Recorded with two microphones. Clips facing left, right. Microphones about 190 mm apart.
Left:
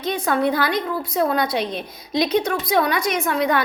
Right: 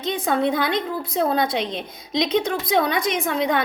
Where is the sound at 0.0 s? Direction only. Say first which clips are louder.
Left 1 dB; 25° right (ahead or behind).